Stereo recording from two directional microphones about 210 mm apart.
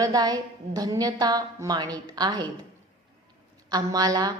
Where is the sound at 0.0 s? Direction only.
20° right (ahead or behind).